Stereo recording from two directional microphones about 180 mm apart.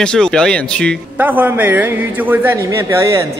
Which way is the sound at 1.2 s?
10° right (ahead or behind).